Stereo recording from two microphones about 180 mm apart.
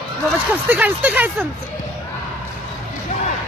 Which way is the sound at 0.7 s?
10° right (ahead or behind).